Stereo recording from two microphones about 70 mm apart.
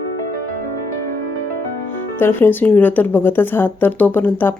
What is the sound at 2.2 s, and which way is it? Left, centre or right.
A woman's voice, left.